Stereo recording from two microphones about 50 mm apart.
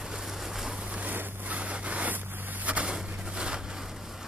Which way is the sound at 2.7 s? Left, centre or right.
Right.